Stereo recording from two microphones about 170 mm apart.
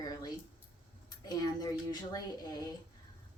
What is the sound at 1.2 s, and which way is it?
A woman's voice, 20° left (ahead or behind).